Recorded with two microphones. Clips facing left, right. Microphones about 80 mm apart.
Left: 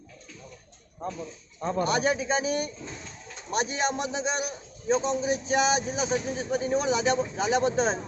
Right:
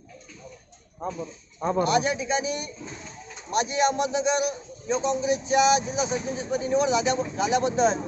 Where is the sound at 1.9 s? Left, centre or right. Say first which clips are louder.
Right 1 dB; left.